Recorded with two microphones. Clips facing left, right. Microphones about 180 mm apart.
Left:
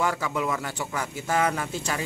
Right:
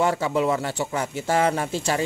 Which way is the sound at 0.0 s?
30° right (ahead or behind).